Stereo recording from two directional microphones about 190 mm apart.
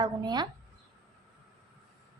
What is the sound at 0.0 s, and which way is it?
Speech, 20° right (ahead or behind).